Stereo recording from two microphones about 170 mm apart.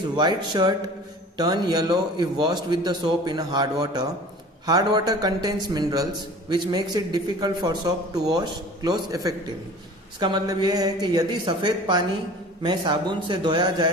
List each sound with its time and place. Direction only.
0.2 s a man's voice: 25° right (ahead or behind)